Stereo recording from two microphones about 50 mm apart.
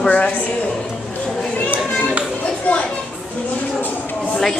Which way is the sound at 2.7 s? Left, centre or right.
Left.